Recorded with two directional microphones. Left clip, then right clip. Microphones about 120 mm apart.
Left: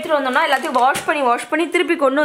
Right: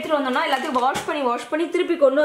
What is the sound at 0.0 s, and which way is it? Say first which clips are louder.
A woman's voice: left 4 dB; 20° left (ahead or behind).